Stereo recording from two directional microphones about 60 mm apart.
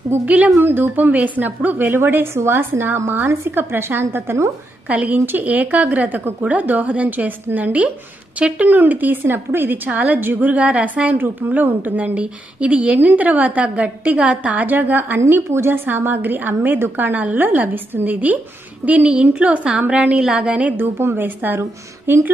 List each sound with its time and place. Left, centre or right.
0.2 s a woman's voice: right
2.3 s a woman's voice: right
4.8 s speech: right
5.2 s a woman's voice: right
5.5 s a woman's voice: right
9.8 s speech: right
11.1 s a woman's voice: right
20.7 s a woman's voice: right